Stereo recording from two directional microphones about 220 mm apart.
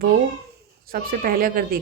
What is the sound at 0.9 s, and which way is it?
Speech, 40° right (ahead or behind).